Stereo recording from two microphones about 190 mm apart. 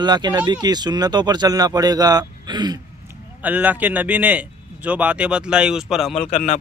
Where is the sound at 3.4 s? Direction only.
10° right (ahead or behind).